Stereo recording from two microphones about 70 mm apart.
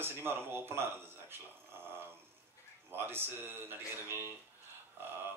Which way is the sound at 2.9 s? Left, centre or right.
Right.